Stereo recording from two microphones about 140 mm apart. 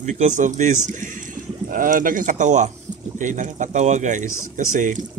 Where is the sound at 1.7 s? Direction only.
80° right.